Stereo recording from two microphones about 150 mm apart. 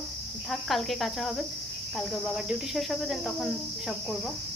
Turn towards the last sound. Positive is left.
turn(degrees=0)  # may be behind; listen again after turning